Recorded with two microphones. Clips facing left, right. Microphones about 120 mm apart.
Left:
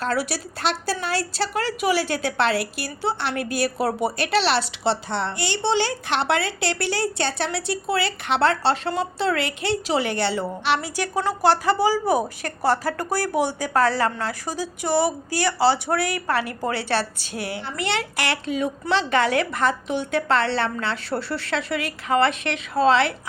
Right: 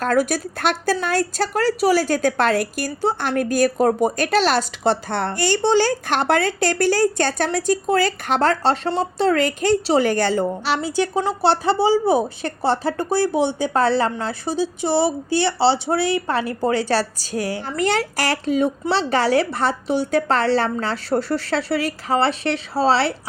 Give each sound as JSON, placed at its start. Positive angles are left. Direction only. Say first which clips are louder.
{"t": 0.0, "sound": "a woman's voice", "louder": "right 6 dB", "side_deg": -45}
{"t": 10.8, "sound": "a woman's voice", "louder": "right 5 dB", "side_deg": -25}